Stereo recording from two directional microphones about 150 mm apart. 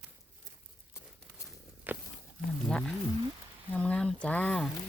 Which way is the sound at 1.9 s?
10° right (ahead or behind).